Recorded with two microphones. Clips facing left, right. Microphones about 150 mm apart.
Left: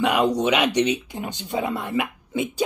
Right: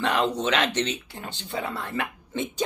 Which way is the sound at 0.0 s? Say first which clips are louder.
Left 4 dB; 15° left (ahead or behind).